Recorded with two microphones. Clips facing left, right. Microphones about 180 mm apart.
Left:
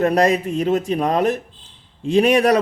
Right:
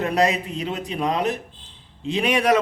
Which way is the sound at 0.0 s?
45° left (ahead or behind).